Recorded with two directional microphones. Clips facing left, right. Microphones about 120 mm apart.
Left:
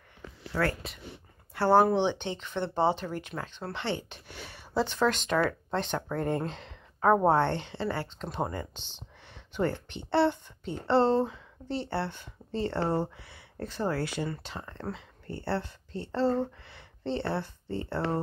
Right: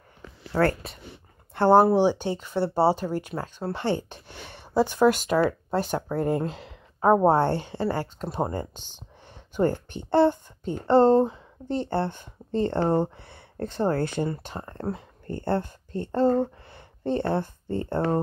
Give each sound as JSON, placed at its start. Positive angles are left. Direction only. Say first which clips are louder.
{"t": 0.5, "sound": "a woman's voice", "louder": "right 6 dB", "side_deg": -45}
{"t": 1.5, "sound": "speech", "louder": "right 5 dB", "side_deg": -20}
{"t": 2.6, "sound": "speech", "louder": "right 5 dB", "side_deg": -35}
{"t": 4.1, "sound": "speech", "louder": "right 3 dB", "side_deg": -20}
{"t": 6.1, "sound": "a woman's voice", "louder": "right 5 dB", "side_deg": -30}
{"t": 7.4, "sound": "speech", "louder": "right 5 dB", "side_deg": -40}
{"t": 8.7, "sound": "speech", "louder": "right 2 dB", "side_deg": -15}
{"t": 9.6, "sound": "speech", "louder": "right 6 dB", "side_deg": -45}
{"t": 12.4, "sound": "a sound", "louder": "right 6 dB", "side_deg": -50}
{"t": 12.7, "sound": "speech", "louder": "right 5 dB", "side_deg": -20}
{"t": 13.0, "sound": "speech", "louder": "right 5 dB", "side_deg": -55}
{"t": 14.3, "sound": "speech", "louder": "right 4 dB", "side_deg": -40}